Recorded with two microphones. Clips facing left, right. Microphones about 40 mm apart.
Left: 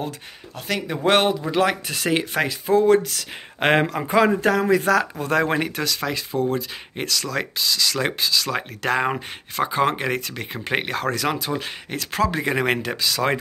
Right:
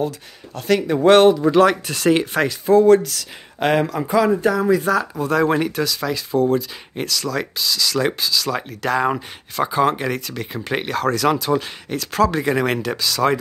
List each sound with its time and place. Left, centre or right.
0.6 s speech: centre
3.5 s speech: left
4.4 s speech: left
5.2 s speech: left